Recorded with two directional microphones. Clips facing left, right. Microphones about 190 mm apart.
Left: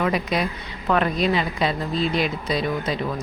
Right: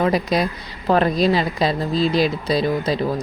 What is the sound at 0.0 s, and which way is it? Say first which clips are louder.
Speech: right 4 dB; 35° right (ahead or behind).